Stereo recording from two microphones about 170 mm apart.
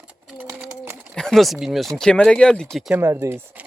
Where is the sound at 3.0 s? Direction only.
15° right (ahead or behind).